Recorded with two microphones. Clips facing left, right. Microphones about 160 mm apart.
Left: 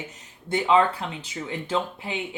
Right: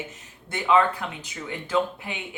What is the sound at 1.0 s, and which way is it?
Speech, 30° left (ahead or behind).